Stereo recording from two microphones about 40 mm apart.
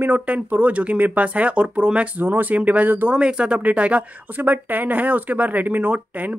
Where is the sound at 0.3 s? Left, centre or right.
Right.